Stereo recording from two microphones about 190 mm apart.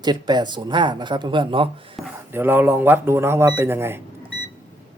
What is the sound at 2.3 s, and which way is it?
Speech, 10° right (ahead or behind).